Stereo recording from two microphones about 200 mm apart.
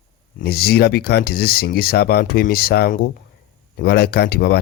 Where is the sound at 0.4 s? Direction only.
50° left (ahead or behind).